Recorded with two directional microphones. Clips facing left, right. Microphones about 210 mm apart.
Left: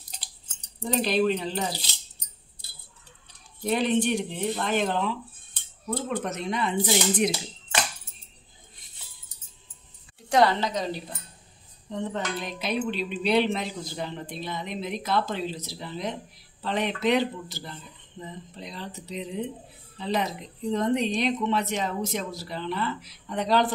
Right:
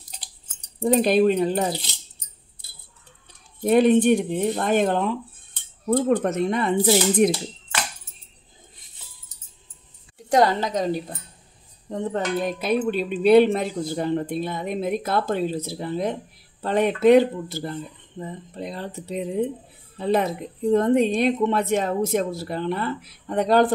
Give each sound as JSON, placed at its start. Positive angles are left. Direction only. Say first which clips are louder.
{"t": 0.7, "sound": "speech", "louder": "right 7 dB", "side_deg": -50}
{"t": 3.6, "sound": "speech", "louder": "right 8 dB", "side_deg": -50}
{"t": 10.3, "sound": "speech", "louder": "right 3 dB", "side_deg": -45}